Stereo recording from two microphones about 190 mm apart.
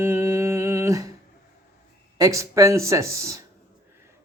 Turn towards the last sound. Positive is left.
turn(degrees=-15)  # may be behind; listen again after turning